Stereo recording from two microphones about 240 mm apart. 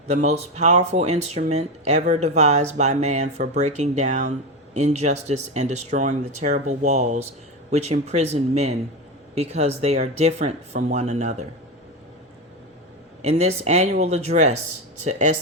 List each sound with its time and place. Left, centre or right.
0.1 s speech: right
13.2 s speech: right